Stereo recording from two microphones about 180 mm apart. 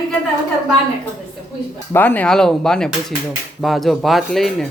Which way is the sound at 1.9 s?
10° left (ahead or behind).